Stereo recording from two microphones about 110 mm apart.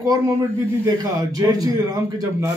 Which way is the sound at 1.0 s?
35° right (ahead or behind).